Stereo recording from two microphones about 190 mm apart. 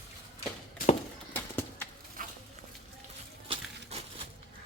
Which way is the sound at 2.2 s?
45° right (ahead or behind).